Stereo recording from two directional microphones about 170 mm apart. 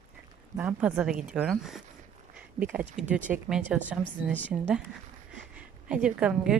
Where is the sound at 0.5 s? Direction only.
10° right (ahead or behind).